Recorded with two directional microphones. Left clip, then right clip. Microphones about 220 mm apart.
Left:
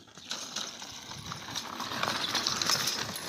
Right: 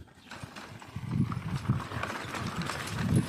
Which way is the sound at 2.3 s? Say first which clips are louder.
Left 7 dB; 5° left (ahead or behind).